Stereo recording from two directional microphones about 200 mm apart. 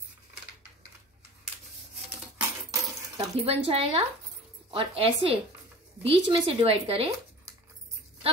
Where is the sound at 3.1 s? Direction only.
30° right (ahead or behind).